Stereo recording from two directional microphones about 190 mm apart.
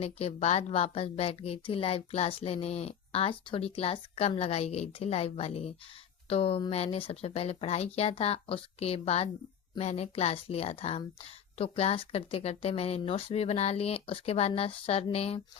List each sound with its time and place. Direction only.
0.0 s speech: 30° left (ahead or behind)